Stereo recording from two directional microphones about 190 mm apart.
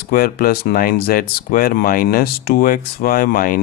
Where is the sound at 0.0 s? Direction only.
50° left (ahead or behind).